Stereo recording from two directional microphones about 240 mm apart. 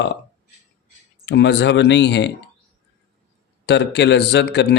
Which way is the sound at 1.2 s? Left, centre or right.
Left.